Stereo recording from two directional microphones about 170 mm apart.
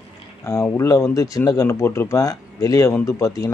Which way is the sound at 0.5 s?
15° left (ahead or behind).